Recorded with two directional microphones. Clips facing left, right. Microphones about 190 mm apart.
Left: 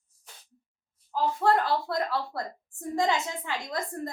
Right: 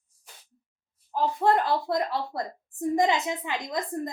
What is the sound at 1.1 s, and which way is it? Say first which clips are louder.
A woman's voice: right 1 dB; 20° right (ahead or behind).